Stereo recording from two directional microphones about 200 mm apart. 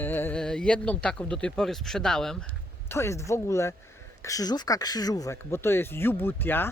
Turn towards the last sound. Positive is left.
turn(degrees=10)  # may be behind; listen again after turning